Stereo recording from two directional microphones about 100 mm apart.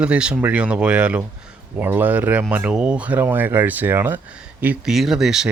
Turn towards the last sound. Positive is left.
turn(degrees=-5)  # may be behind; listen again after turning